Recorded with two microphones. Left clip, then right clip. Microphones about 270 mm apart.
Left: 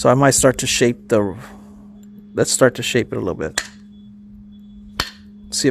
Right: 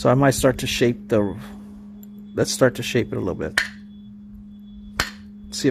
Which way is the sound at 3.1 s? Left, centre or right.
Left.